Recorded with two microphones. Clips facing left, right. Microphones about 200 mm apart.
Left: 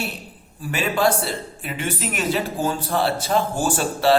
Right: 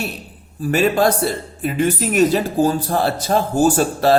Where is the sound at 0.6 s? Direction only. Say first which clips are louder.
Right 5 dB; 40° right (ahead or behind).